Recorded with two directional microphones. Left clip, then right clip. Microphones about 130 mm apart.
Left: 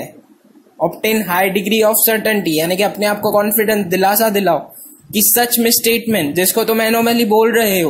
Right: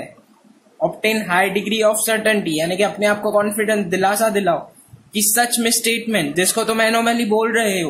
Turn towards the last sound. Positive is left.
turn(degrees=35)  # may be behind; listen again after turning